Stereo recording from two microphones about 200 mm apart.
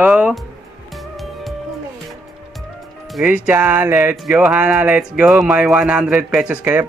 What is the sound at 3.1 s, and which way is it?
Music, centre (ahead or behind).